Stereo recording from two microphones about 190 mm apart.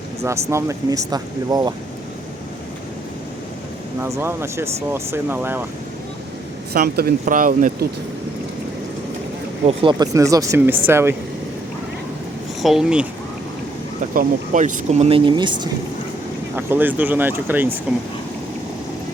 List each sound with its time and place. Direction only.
0.2 s speech: 15° right (ahead or behind)
4.0 s speech: 15° right (ahead or behind)
6.7 s speech: 55° right (ahead or behind)
9.6 s speech: 25° right (ahead or behind)
12.6 s speech: 5° right (ahead or behind)
14.0 s speech: 45° right (ahead or behind); by 15.7 s 25° right (ahead or behind)
16.6 s speech: 10° right (ahead or behind)